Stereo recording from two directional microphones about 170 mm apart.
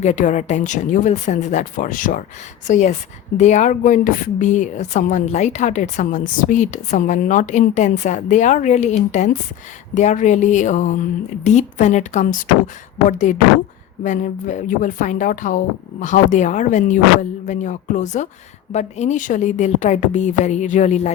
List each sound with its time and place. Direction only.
0.0 s a woman's voice: 45° left (ahead or behind)